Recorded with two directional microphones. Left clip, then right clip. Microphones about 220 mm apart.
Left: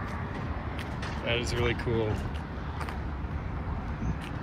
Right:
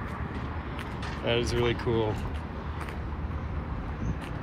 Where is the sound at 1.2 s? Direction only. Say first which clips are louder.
Right 3 dB; 10° right (ahead or behind).